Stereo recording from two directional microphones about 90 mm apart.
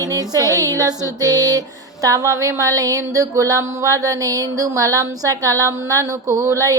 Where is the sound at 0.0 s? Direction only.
45° right (ahead or behind).